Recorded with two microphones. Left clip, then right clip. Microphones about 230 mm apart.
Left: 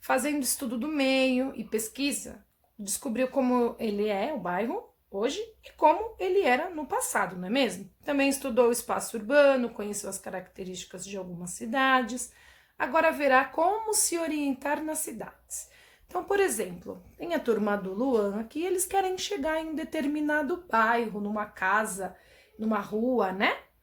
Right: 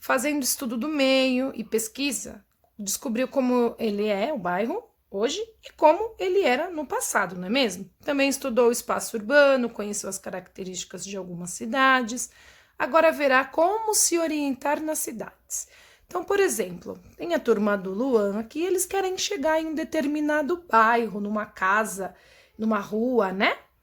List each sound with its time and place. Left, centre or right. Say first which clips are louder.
0.0 s speech: right 3 dB; right